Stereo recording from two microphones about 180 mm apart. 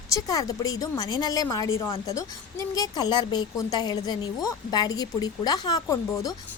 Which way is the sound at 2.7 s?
20° left (ahead or behind).